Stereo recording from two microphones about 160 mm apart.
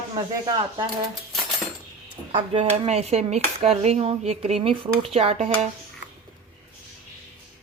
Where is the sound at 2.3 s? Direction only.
40° right (ahead or behind).